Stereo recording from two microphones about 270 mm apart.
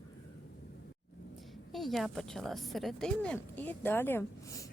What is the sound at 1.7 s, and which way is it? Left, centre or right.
A woman's voice, centre.